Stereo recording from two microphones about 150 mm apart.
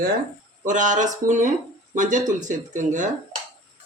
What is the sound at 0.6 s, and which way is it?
Speech, 55° right (ahead or behind).